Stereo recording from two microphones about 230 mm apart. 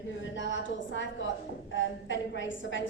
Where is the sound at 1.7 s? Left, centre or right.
Left.